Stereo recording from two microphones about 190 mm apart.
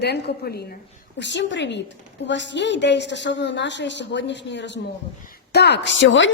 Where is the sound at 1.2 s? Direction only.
70° left (ahead or behind).